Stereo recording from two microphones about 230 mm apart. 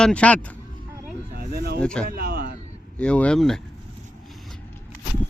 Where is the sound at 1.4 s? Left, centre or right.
Right.